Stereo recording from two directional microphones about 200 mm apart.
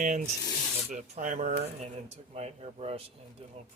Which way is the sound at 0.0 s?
40° right (ahead or behind).